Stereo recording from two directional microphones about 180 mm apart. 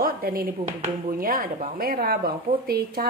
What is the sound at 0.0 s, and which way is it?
Speech, 55° right (ahead or behind).